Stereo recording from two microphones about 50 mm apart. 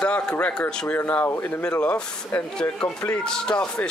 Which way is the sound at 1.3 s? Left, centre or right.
Left.